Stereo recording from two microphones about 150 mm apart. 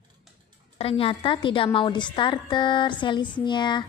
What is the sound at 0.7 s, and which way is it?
A woman's voice, 40° left (ahead or behind).